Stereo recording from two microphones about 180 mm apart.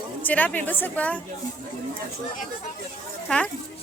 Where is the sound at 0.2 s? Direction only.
10° left (ahead or behind).